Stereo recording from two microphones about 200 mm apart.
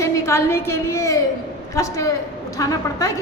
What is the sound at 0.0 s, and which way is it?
A woman's voice, 15° left (ahead or behind).